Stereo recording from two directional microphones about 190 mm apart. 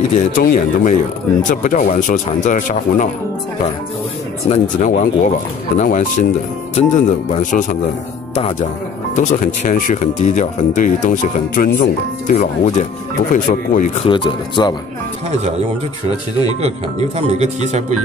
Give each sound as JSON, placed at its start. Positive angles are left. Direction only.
{"t": 0.4, "sound": "speech", "side_deg": 45}
{"t": 4.5, "sound": "speech", "side_deg": 40}
{"t": 14.0, "sound": "speech", "side_deg": 25}
{"t": 16.6, "sound": "speech", "side_deg": -35}